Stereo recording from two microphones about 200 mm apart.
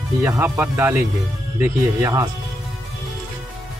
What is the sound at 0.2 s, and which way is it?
Speech, 10° right (ahead or behind).